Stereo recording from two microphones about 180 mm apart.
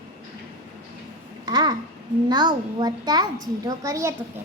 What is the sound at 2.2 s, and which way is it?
A woman's voice, 25° right (ahead or behind).